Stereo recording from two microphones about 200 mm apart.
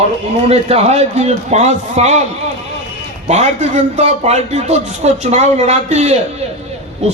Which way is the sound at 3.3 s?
35° right (ahead or behind).